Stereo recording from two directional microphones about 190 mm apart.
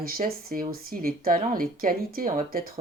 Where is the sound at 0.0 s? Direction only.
50° right (ahead or behind).